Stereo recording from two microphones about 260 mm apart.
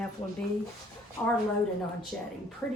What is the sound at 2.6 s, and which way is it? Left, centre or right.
Speech, centre.